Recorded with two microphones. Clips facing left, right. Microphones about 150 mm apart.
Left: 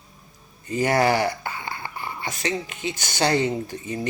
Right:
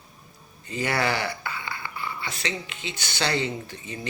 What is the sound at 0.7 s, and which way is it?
Speech, 45° left (ahead or behind).